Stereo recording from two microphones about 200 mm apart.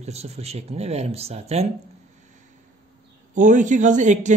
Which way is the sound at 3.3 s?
40° right (ahead or behind).